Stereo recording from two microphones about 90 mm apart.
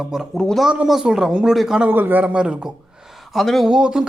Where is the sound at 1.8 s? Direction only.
20° right (ahead or behind).